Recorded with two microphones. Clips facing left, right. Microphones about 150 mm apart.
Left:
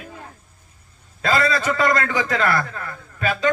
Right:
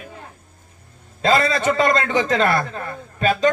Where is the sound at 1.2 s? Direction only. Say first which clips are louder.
Right 2 dB; 20° right (ahead or behind).